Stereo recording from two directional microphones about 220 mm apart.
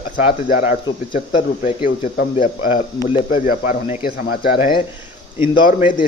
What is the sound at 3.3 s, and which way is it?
Speech, 40° left (ahead or behind).